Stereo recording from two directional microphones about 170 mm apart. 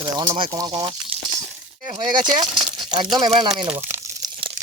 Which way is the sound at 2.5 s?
Centre (ahead or behind).